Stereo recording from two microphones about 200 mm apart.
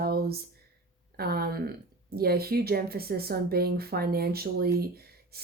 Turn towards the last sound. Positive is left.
turn(degrees=-50)  # may be behind; listen again after turning